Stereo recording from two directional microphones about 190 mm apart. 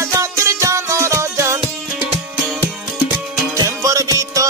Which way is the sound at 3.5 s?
15° right (ahead or behind).